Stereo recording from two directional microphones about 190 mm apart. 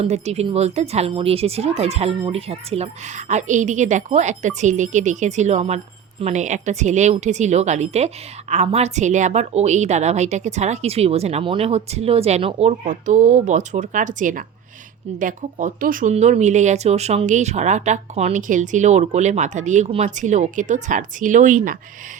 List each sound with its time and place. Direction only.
0.0 s speech: 35° right (ahead or behind)